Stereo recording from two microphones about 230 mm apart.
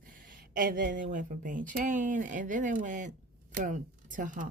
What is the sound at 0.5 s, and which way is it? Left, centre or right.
Speech, right.